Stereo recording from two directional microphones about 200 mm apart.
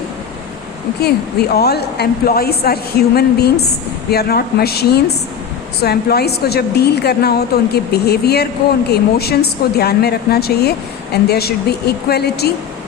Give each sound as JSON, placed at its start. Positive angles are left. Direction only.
{"t": 1.0, "sound": "a woman's voice", "side_deg": 55}